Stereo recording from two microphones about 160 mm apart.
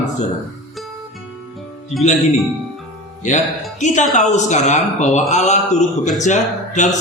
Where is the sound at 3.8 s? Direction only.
50° left (ahead or behind).